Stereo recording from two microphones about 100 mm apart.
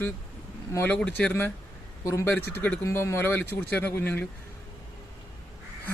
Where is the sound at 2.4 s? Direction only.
20° left (ahead or behind).